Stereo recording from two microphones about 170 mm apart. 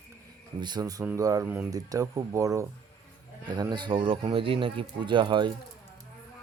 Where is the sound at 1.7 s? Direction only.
20° right (ahead or behind).